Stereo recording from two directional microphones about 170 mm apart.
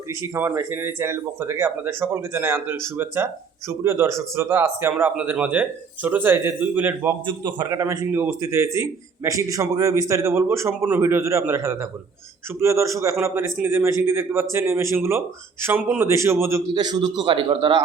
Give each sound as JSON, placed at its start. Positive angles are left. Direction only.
{"t": 0.1, "sound": "a man's voice", "side_deg": -15}
{"t": 7.3, "sound": "a man's voice", "side_deg": -25}